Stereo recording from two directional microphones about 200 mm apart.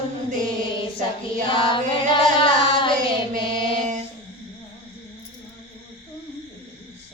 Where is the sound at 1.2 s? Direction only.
25° left (ahead or behind).